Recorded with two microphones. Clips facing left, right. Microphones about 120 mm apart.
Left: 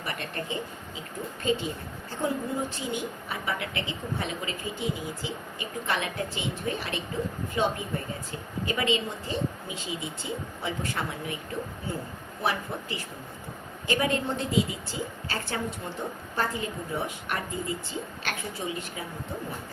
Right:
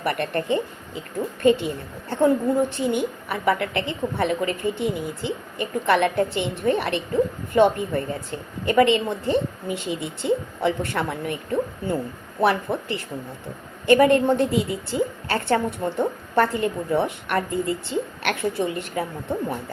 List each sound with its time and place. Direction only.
0.0 s speech: 60° right (ahead or behind)
12.4 s speech: 60° right (ahead or behind)